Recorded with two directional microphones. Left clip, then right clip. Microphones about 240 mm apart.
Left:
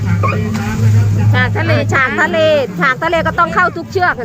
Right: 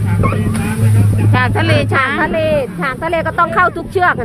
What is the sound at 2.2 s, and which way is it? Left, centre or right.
Speech, centre.